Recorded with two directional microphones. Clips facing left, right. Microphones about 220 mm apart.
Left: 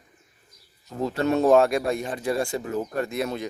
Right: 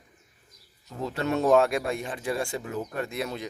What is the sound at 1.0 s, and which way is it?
Speech, 40° left (ahead or behind).